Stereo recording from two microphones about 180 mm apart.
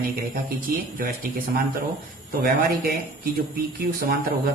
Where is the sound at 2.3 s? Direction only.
55° right (ahead or behind).